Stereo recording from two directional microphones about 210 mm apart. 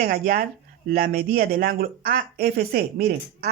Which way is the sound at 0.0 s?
45° right (ahead or behind).